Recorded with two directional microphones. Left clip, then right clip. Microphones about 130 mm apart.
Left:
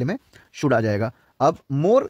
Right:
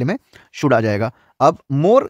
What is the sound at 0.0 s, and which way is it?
Speech, 40° right (ahead or behind).